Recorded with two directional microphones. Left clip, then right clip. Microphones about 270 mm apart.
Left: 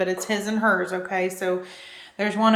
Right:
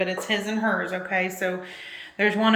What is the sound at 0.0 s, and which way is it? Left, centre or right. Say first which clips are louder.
A woman's voice: left 1 dB; left.